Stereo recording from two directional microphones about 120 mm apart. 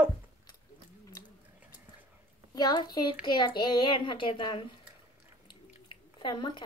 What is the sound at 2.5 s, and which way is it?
Speech, 35° left (ahead or behind).